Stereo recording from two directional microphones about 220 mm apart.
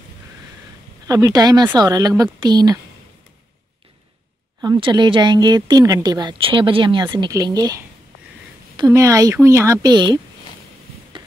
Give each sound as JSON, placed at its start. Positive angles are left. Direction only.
{"t": 1.0, "sound": "speech", "side_deg": -15}
{"t": 4.6, "sound": "speech", "side_deg": -20}